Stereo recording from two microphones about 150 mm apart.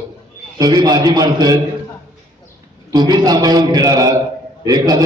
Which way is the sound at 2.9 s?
25° right (ahead or behind).